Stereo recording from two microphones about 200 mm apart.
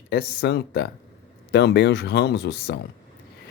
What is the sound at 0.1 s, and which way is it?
Speech, 55° left (ahead or behind).